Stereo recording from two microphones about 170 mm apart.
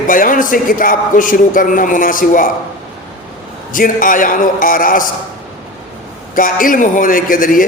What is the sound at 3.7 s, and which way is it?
A woman's voice, 55° left (ahead or behind).